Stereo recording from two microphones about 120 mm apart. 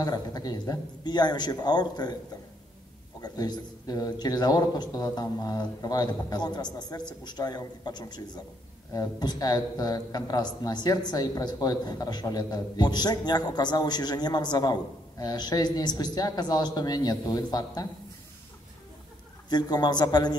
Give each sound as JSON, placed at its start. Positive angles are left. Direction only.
{"t": 0.0, "sound": "a man's voice", "side_deg": 35}
{"t": 3.2, "sound": "a man's voice", "side_deg": 35}
{"t": 19.5, "sound": "a man's voice", "side_deg": 35}